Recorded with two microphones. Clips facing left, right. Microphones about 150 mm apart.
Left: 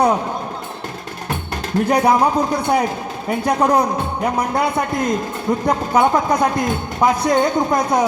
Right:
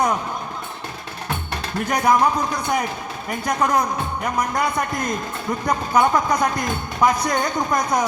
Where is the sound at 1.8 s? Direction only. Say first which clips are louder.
Left 2 dB; 30° left (ahead or behind).